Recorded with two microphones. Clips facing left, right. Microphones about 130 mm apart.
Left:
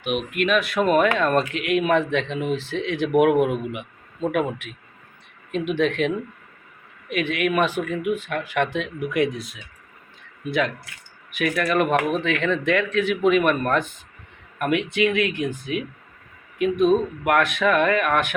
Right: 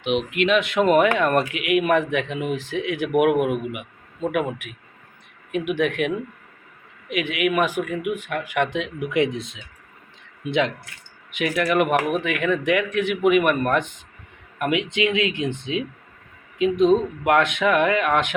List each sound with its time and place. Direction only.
0.0 s speech: 20° right (ahead or behind)
11.3 s speech: 20° right (ahead or behind)